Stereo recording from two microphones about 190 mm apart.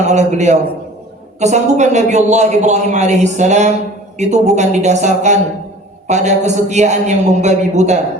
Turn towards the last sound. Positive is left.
turn(degrees=-35)  # may be behind; listen again after turning